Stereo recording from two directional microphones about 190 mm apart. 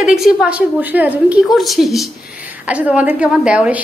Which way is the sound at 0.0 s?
5° right (ahead or behind).